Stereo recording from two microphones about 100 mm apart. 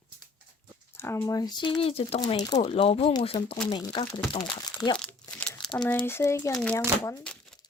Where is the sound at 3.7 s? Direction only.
55° left (ahead or behind).